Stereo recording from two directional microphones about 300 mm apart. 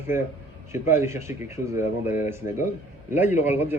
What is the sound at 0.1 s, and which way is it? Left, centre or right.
Speech, centre.